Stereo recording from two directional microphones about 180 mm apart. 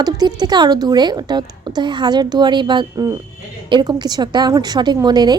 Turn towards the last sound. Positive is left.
turn(degrees=-25)  # may be behind; listen again after turning